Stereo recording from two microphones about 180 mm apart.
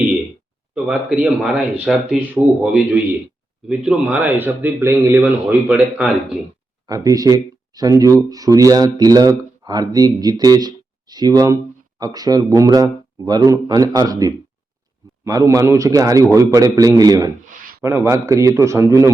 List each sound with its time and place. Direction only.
0.9 s speech: 5° right (ahead or behind)
6.8 s speech: 20° right (ahead or behind)